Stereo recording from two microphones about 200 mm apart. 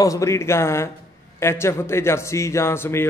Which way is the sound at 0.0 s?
15° left (ahead or behind).